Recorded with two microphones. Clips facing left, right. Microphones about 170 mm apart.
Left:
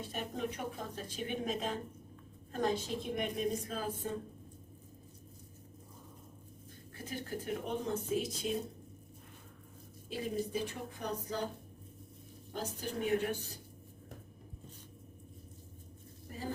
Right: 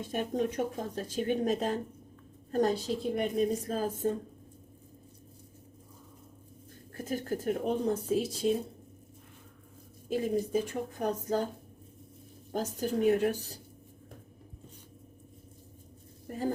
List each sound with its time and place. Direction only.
0.3 s a woman's voice: 45° right (ahead or behind)
6.9 s a woman's voice: 45° right (ahead or behind)
10.1 s a woman's voice: 45° right (ahead or behind)
12.5 s a woman's voice: 45° right (ahead or behind)